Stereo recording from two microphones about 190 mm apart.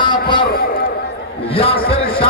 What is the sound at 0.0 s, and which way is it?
Vehicle, 25° left (ahead or behind).